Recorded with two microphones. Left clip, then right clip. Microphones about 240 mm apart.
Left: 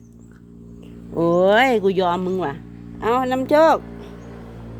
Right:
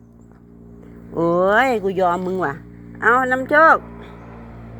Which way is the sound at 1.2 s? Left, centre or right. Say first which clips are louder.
Left 1 dB; centre.